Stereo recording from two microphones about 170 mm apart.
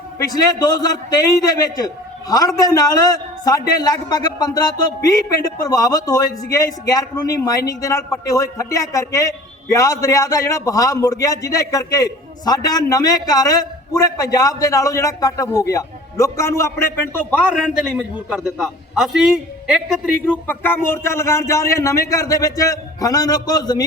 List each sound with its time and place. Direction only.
0.3 s a man's voice: 25° left (ahead or behind); by 20.1 s 5° right (ahead or behind)
20.5 s a man's voice: 10° left (ahead or behind)